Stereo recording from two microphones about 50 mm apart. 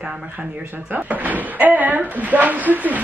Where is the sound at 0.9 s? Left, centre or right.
Right.